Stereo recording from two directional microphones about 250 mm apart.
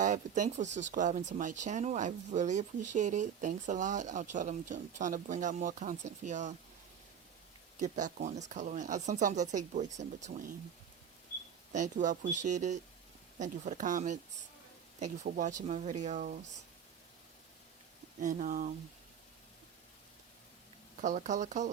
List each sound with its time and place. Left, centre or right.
0.0 s speech: right
7.8 s speech: right
11.7 s speech: right
18.2 s speech: right
21.0 s speech: right